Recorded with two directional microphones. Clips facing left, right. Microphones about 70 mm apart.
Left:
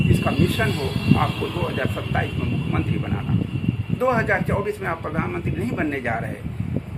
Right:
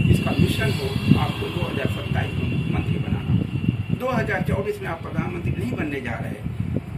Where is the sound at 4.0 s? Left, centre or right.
Left.